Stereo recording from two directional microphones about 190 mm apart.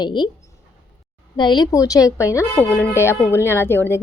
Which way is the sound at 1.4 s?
25° left (ahead or behind).